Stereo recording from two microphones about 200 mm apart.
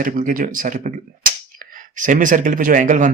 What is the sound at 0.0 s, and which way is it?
Speech, 45° right (ahead or behind).